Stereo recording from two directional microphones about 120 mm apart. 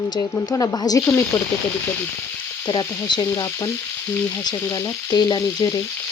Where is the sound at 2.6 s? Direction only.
40° left (ahead or behind).